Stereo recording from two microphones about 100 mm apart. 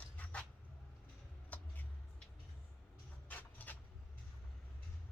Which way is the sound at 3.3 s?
15° left (ahead or behind).